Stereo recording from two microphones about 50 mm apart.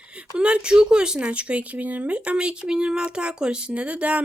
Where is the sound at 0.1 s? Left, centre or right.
Right.